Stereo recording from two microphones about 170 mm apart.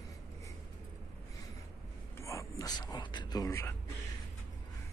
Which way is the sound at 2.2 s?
20° left (ahead or behind).